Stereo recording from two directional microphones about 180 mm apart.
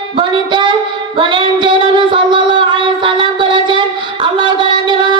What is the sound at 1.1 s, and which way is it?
Child singing, 30° right (ahead or behind).